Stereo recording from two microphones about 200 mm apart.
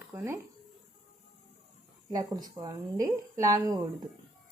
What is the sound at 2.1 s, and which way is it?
A woman's voice, 20° right (ahead or behind).